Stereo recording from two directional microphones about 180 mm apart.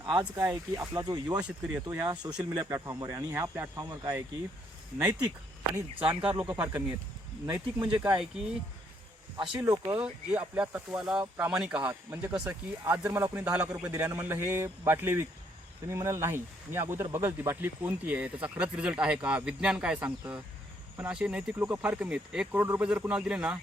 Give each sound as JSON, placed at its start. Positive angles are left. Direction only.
{"t": 0.0, "sound": "speech", "side_deg": -25}
{"t": 1.5, "sound": "speech", "side_deg": -5}
{"t": 4.9, "sound": "speech", "side_deg": -5}
{"t": 6.4, "sound": "speech", "side_deg": -10}
{"t": 7.4, "sound": "speech", "side_deg": -20}
{"t": 9.6, "sound": "speech", "side_deg": -15}